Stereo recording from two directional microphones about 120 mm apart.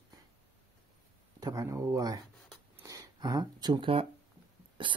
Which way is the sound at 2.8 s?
30° right (ahead or behind).